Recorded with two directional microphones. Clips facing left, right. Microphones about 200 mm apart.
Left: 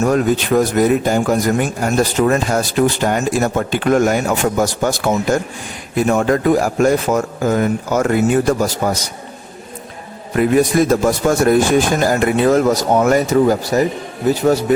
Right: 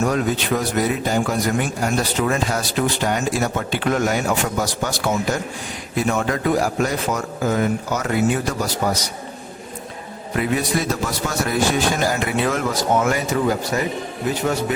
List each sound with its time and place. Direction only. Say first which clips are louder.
0.0 s a man's voice: left 5 dB; 45° left (ahead or behind)
10.3 s a man's voice: left 8 dB; 50° left (ahead or behind)